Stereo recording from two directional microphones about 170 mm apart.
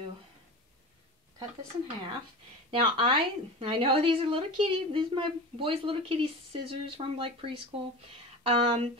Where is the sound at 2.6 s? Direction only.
30° right (ahead or behind).